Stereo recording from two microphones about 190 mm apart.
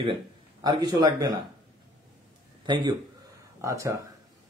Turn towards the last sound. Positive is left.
turn(degrees=-15)  # may be behind; listen again after turning